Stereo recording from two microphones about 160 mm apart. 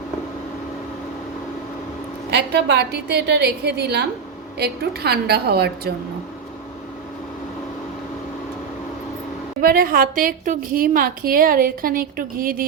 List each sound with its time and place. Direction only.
2.3 s a woman's voice: 90° right
9.6 s a woman's voice: 60° right (ahead or behind)